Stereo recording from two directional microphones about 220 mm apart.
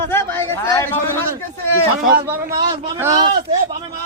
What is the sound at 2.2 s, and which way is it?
A man's voice, 20° right (ahead or behind).